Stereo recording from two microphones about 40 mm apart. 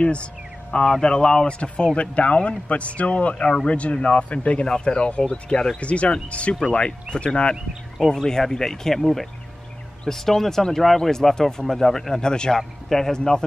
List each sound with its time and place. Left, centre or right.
0.0 s speech: left
0.7 s speech: centre
2.0 s speech: left
8.0 s speech: centre
12.2 s speech: centre